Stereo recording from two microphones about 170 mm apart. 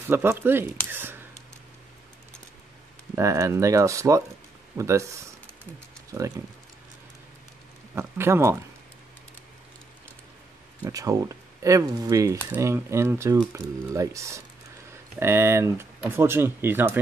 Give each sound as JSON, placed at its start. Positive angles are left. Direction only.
{"t": 0.1, "sound": "speech", "side_deg": -10}
{"t": 3.2, "sound": "speech", "side_deg": -15}
{"t": 7.9, "sound": "speech", "side_deg": -15}
{"t": 10.8, "sound": "speech", "side_deg": -20}